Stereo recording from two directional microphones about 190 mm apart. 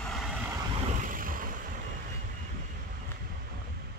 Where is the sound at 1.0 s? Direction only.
45° right (ahead or behind).